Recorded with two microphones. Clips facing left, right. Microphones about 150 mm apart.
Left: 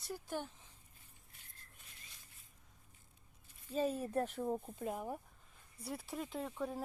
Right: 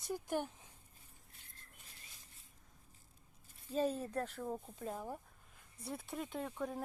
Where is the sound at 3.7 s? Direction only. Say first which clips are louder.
Even; centre (ahead or behind).